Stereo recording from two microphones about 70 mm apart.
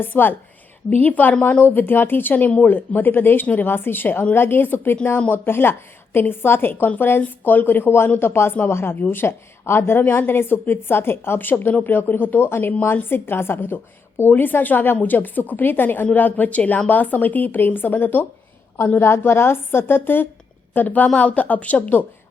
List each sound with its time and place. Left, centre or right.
0.0 s a woman's voice: left
19.0 s a woman's voice: left